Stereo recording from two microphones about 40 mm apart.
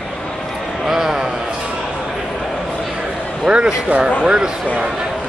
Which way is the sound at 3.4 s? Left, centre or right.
Right.